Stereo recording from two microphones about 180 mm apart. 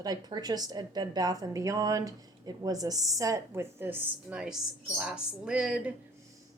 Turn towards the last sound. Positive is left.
turn(degrees=-5)  # may be behind; listen again after turning